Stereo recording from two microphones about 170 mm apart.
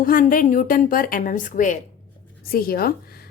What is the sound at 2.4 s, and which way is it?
Speech, 60° left (ahead or behind).